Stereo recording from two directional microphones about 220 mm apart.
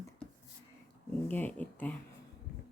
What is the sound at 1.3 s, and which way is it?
Speech, 5° left (ahead or behind).